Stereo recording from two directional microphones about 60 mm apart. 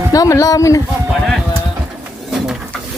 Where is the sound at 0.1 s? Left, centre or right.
Left.